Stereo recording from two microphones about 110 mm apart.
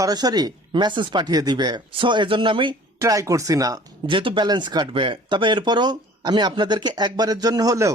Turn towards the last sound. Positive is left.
turn(degrees=-30)  # may be behind; listen again after turning